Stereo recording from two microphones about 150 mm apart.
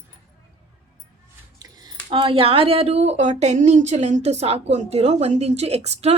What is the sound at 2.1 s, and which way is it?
Speech, 35° right (ahead or behind).